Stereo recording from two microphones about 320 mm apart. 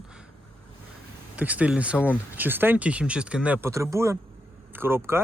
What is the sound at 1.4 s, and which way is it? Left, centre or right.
Speech, centre.